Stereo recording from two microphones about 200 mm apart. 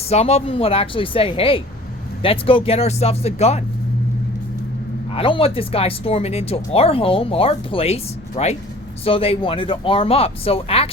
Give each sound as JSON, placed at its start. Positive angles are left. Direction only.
{"t": 0.1, "sound": "speech", "side_deg": 30}
{"t": 5.1, "sound": "speech", "side_deg": 25}